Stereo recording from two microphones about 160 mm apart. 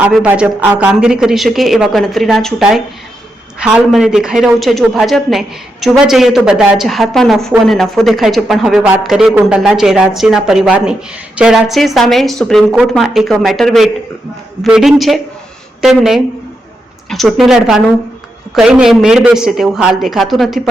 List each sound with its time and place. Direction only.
0.0 s speech: 10° right (ahead or behind)